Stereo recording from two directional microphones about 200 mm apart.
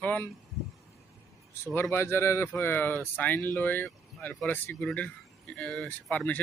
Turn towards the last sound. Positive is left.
turn(degrees=5)  # may be behind; listen again after turning